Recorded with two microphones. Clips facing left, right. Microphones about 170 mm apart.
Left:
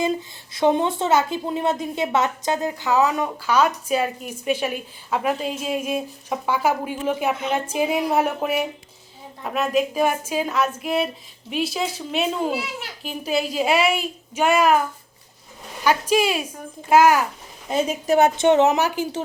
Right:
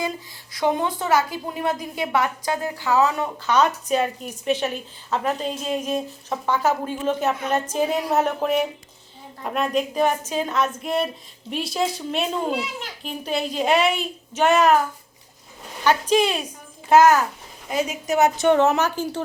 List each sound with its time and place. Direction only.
0.5 s a woman's voice: 25° left (ahead or behind)
15.8 s a woman's voice: 10° left (ahead or behind)
17.7 s a woman's voice: 30° left (ahead or behind); by 19.2 s 15° left (ahead or behind)